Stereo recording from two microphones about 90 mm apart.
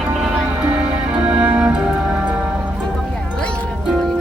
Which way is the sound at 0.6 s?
15° right (ahead or behind).